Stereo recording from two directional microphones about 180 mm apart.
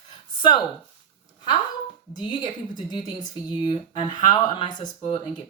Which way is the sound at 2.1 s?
25° left (ahead or behind).